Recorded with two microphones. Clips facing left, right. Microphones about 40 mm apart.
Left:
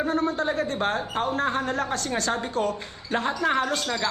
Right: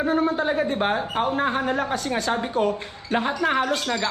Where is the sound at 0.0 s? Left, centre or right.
Centre.